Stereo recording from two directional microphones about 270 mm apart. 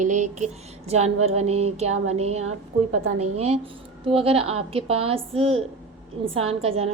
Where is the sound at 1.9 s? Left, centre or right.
Right.